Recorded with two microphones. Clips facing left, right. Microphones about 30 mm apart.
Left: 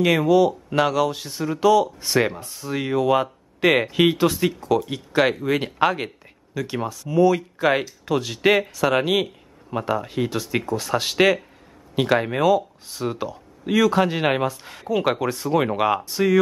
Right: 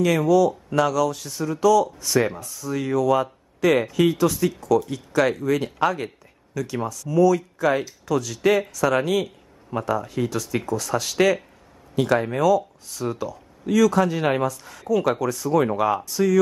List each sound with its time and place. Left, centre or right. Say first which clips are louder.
0.0 s a man's voice: left 1 dB; left